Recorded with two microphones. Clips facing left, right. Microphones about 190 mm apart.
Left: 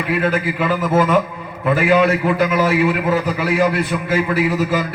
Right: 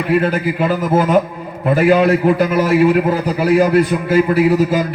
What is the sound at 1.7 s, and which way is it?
A man's voice, 40° right (ahead or behind).